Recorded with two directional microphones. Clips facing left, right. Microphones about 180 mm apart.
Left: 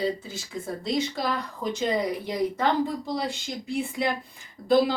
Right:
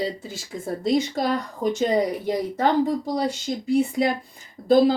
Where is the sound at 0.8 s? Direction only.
45° right (ahead or behind).